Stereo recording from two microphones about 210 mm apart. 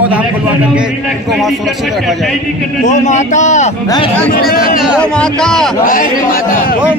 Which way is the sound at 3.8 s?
20° left (ahead or behind).